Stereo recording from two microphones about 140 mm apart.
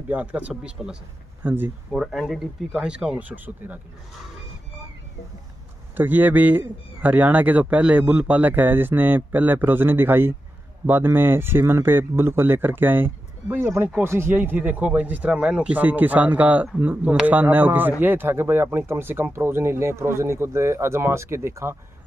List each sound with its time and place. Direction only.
0.1 s speech: 10° right (ahead or behind)
1.9 s speech: centre (ahead or behind)
5.9 s speech: 15° right (ahead or behind)